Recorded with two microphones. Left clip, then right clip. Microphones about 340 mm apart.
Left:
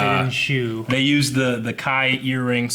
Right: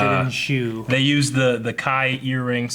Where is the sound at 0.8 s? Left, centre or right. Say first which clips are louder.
Even; right.